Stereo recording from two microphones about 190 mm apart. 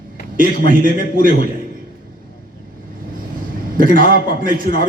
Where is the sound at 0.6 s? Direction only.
45° right (ahead or behind).